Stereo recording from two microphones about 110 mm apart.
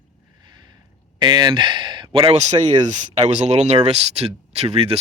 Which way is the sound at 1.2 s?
45° right (ahead or behind).